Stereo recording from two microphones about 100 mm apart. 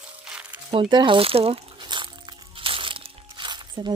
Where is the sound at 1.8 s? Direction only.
50° right (ahead or behind).